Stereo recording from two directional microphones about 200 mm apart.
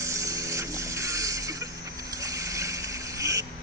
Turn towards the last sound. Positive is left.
turn(degrees=-15)  # may be behind; listen again after turning